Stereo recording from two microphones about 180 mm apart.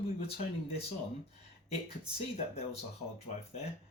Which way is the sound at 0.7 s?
35° left (ahead or behind).